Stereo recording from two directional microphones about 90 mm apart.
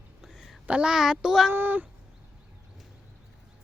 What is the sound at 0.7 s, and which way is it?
Speech, 10° right (ahead or behind).